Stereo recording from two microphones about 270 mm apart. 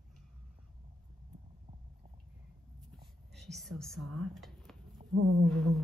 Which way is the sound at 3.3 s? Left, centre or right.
Centre.